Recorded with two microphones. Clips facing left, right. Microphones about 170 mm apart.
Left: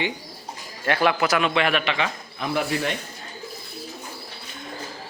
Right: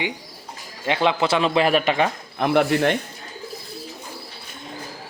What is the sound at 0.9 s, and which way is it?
A man's voice, 20° right (ahead or behind).